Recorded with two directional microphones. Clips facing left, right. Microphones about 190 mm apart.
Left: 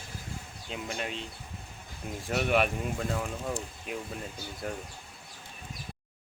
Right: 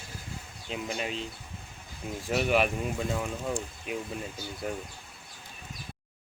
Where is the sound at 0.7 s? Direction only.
5° right (ahead or behind).